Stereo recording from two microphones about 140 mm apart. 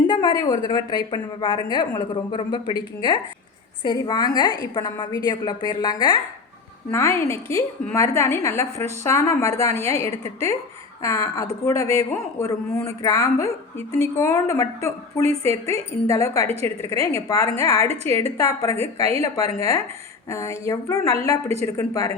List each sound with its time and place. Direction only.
0.1 s a woman's voice: 30° left (ahead or behind)